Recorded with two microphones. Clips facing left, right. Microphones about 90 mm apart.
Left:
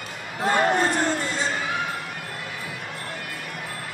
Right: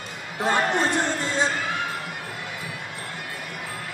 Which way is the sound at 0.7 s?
20° right (ahead or behind).